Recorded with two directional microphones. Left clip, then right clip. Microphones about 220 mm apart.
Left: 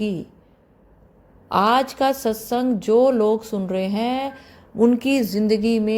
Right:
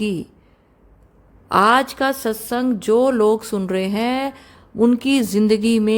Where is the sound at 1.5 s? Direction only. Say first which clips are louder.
Right 3 dB; 20° right (ahead or behind).